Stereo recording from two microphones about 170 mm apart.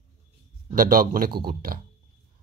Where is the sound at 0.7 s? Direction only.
55° right (ahead or behind).